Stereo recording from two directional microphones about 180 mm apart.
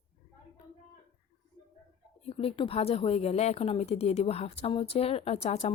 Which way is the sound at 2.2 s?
35° left (ahead or behind).